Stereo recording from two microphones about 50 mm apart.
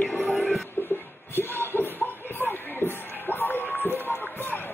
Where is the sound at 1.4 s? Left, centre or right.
Left.